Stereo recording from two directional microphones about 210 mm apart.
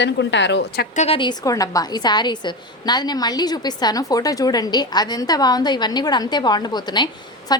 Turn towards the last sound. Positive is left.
turn(degrees=20)  # may be behind; listen again after turning